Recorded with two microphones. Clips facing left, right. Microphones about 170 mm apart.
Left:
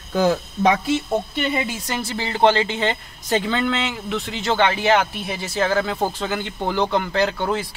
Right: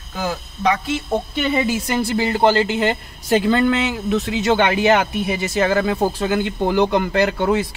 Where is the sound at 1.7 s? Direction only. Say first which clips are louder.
Right 7 dB; 10° right (ahead or behind).